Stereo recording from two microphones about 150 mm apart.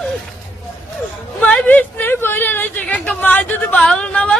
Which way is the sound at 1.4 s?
10° left (ahead or behind).